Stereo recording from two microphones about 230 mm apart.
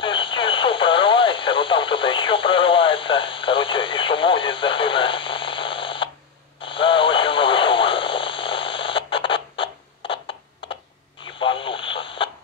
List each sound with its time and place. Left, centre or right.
0.0 s radio: left